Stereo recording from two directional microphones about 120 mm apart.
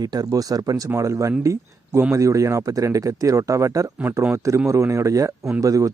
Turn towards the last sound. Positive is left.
turn(degrees=-30)  # may be behind; listen again after turning